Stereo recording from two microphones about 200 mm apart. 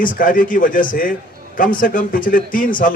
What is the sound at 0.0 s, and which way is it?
A man's voice, 45° left (ahead or behind).